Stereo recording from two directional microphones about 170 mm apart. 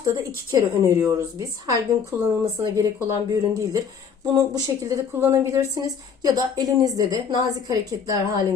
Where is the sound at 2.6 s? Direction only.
20° right (ahead or behind).